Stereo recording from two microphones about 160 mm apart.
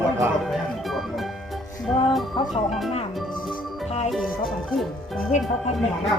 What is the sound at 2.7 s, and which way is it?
Speech, centre (ahead or behind).